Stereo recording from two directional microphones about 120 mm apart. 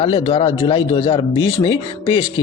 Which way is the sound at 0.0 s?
45° left (ahead or behind).